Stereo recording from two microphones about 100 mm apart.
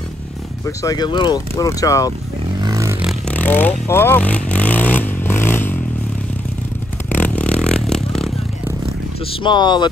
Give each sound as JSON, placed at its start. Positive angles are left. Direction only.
{"t": 0.7, "sound": "speech", "side_deg": 40}
{"t": 1.5, "sound": "speech", "side_deg": 35}
{"t": 2.6, "sound": "a sound", "side_deg": -40}
{"t": 3.3, "sound": "vehicle", "side_deg": 15}
{"t": 7.1, "sound": "vehicle", "side_deg": 15}
{"t": 9.4, "sound": "speech", "side_deg": 50}